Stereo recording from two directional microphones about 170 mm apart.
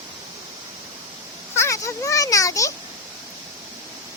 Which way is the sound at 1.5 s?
15° left (ahead or behind).